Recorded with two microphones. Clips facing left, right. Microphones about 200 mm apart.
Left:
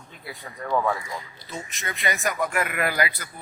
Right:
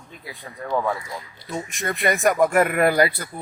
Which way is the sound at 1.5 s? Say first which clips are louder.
Right 7 dB; 50° right (ahead or behind).